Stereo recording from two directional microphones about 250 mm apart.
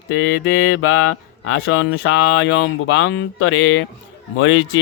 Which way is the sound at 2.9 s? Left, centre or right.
Left.